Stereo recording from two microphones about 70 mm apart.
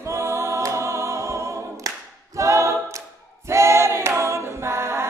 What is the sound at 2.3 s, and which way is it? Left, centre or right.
A capella, right.